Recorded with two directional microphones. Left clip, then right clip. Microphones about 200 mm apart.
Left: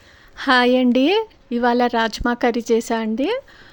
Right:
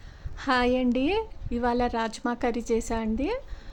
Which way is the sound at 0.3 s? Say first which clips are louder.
Left 9 dB; 25° left (ahead or behind).